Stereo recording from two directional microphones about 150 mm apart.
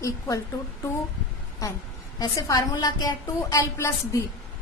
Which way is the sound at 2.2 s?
20° left (ahead or behind).